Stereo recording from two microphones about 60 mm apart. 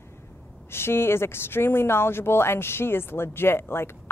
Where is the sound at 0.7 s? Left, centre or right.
Left.